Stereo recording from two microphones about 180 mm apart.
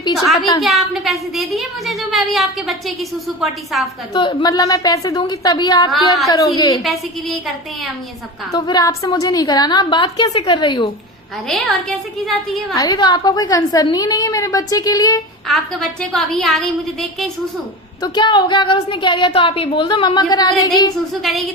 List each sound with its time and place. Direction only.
0.3 s a woman's voice: 20° left (ahead or behind)
0.6 s speech: centre (ahead or behind)
4.1 s a woman's voice: 25° left (ahead or behind)
6.8 s speech: centre (ahead or behind)
8.5 s a woman's voice: 20° left (ahead or behind)
11.4 s speech: 5° left (ahead or behind)
12.7 s a woman's voice: 20° left (ahead or behind)
15.4 s speech: centre (ahead or behind)
18.0 s a woman's voice: 25° left (ahead or behind)
21.1 s speech: centre (ahead or behind)